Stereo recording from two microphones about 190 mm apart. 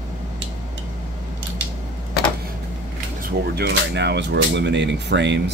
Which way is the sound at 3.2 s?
55° right (ahead or behind).